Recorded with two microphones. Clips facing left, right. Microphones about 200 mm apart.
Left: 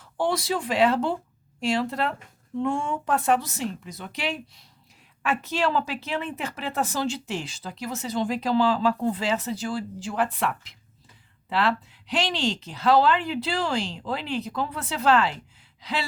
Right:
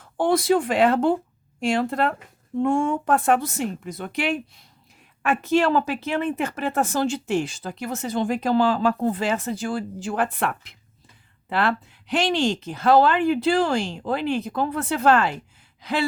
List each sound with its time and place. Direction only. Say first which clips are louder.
0.0 s speech: right 5 dB; 50° right (ahead or behind)
15.8 s gasp: right 6 dB; 50° right (ahead or behind)